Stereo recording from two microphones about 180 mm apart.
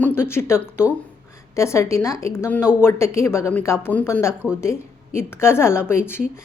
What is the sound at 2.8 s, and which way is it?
A woman's voice, 15° left (ahead or behind).